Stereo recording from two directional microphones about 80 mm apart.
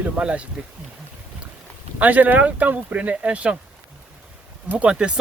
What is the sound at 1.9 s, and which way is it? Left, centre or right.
Speech, right.